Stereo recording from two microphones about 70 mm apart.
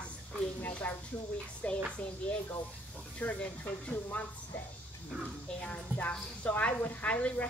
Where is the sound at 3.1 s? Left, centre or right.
Left.